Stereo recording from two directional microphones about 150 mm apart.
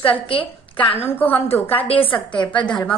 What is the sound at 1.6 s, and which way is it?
Speech, 40° left (ahead or behind).